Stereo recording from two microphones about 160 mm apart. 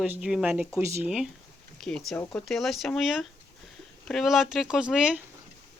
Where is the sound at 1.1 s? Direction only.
5° right (ahead or behind).